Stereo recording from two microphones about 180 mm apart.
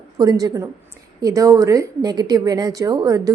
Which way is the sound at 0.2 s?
20° right (ahead or behind).